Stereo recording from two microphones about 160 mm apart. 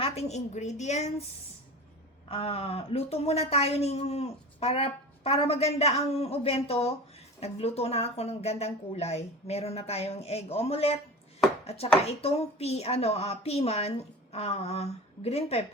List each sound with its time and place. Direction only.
0.0 s a woman's voice: 40° left (ahead or behind)
2.3 s a woman's voice: 35° left (ahead or behind)